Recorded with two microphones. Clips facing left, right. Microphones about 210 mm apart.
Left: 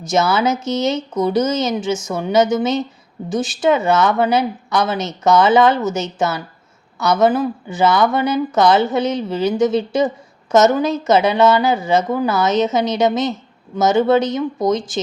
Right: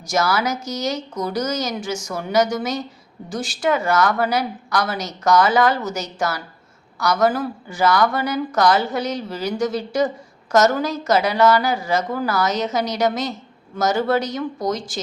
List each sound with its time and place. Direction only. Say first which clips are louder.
0.0 s speech: left 4 dB; 25° left (ahead or behind)